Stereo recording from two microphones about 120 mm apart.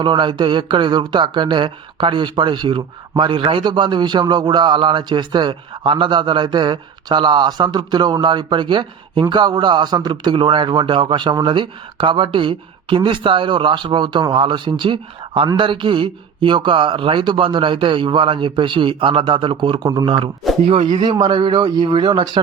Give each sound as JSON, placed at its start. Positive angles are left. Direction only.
{"t": 0.0, "sound": "speech", "side_deg": -40}